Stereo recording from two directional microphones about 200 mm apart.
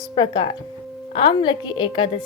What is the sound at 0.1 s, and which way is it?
A woman's voice, 25° left (ahead or behind).